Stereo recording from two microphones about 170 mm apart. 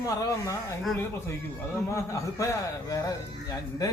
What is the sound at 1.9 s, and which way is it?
A man's voice, 15° left (ahead or behind).